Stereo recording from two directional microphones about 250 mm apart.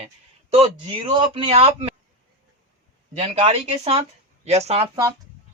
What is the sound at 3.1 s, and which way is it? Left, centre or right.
Speech, right.